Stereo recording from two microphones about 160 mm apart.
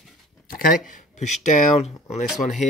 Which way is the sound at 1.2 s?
45° left (ahead or behind).